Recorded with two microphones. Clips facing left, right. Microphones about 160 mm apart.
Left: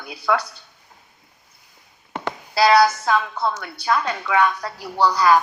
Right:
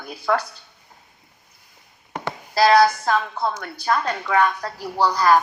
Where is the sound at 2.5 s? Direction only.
35° right (ahead or behind).